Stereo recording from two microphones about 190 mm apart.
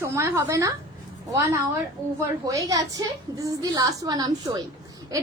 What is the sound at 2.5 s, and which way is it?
A woman's voice, 20° right (ahead or behind).